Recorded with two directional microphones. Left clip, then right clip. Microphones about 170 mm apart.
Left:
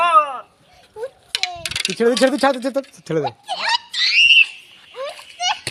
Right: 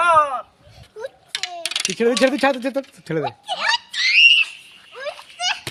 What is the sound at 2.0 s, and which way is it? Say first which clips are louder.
Speech: left 2 dB; 5° left (ahead or behind).